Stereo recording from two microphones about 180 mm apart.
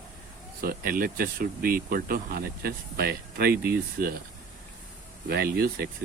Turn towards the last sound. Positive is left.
turn(degrees=-60)  # may be behind; listen again after turning